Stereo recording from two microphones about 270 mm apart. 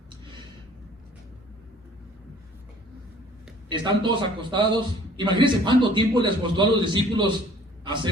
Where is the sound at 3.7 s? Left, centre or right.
Centre.